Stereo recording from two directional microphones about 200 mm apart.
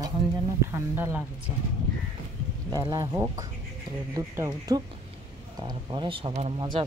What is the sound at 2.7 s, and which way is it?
Speech, 15° right (ahead or behind).